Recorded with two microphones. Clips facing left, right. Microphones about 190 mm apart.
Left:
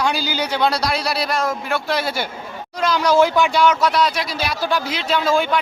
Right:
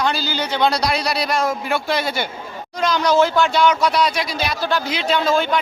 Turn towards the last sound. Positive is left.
turn(degrees=10)  # may be behind; listen again after turning